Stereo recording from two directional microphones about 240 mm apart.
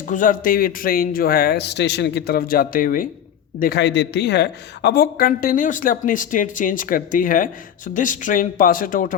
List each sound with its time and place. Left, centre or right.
0.1 s a woman's voice: left